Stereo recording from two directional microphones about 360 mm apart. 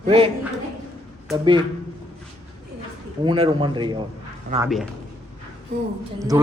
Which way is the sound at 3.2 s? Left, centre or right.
Centre.